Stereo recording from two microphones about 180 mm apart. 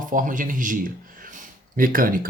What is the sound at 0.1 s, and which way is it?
Speech, 45° right (ahead or behind).